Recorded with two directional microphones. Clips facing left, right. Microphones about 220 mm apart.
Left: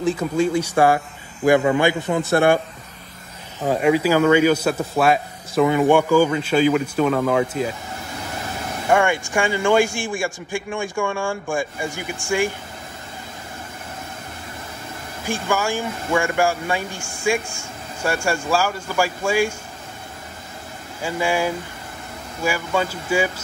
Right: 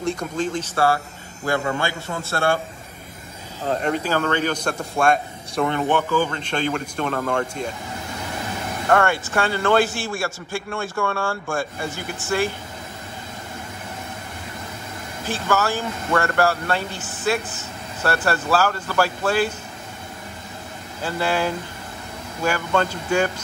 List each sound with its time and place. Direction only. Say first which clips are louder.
0.0 s speech: left 5 dB; 5° left (ahead or behind)
3.6 s speech: left 6 dB; 5° left (ahead or behind)
8.8 s speech: left 1 dB; 15° left (ahead or behind)
15.2 s speech: even; 15° left (ahead or behind)
21.0 s speech: left 1 dB; 10° left (ahead or behind)